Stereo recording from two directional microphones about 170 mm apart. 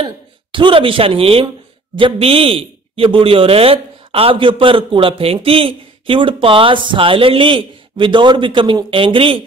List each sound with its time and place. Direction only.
0.0 s speech: 30° right (ahead or behind)